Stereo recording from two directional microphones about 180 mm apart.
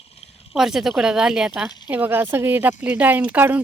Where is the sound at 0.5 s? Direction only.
Centre (ahead or behind).